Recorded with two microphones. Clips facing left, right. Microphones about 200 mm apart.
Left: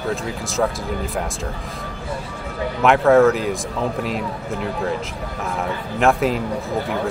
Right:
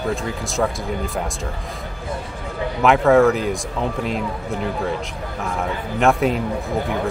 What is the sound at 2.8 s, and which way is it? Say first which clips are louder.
Speech: left 1 dB; centre (ahead or behind).